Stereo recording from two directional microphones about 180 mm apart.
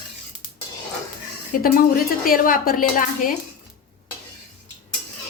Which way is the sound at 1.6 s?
50° left (ahead or behind).